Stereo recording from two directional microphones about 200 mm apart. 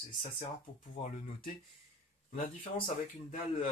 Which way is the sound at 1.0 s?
30° left (ahead or behind).